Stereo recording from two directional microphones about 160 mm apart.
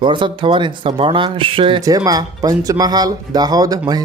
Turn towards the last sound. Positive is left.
turn(degrees=-25)  # may be behind; listen again after turning